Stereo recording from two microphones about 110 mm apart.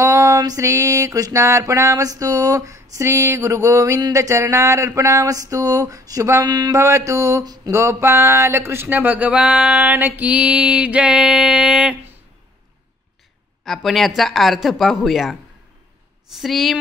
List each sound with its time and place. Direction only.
0.0 s music: 25° right (ahead or behind)
7.7 s a sound: 25° right (ahead or behind); by 12.0 s 10° right (ahead or behind)
13.7 s speech: centre (ahead or behind)
16.3 s speech: centre (ahead or behind)